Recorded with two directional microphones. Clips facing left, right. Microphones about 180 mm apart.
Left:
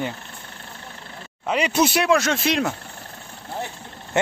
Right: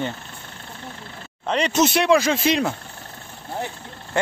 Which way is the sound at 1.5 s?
10° left (ahead or behind).